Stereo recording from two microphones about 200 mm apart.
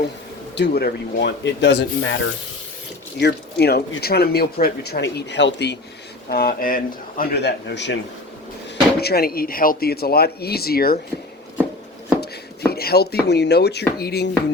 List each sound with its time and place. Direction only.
0.5 s speech: 55° left (ahead or behind)
3.2 s speech: 55° left (ahead or behind)
6.3 s speech: 50° left (ahead or behind)
9.0 s speech: 50° left (ahead or behind)
12.7 s speech: 50° left (ahead or behind)